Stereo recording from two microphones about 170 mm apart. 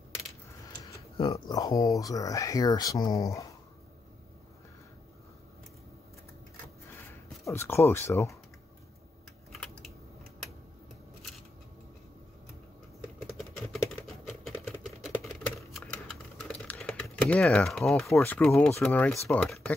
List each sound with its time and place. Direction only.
1.2 s speech: 20° left (ahead or behind)
6.9 s a sound: 15° left (ahead or behind)
9.5 s typing: 5° left (ahead or behind)
15.7 s typing: 5° left (ahead or behind)
18.1 s speech: 10° left (ahead or behind)